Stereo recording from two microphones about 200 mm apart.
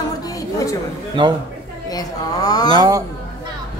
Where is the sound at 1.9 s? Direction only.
20° left (ahead or behind).